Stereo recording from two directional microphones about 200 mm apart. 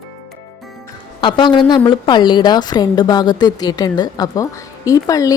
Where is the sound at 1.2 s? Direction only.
25° left (ahead or behind).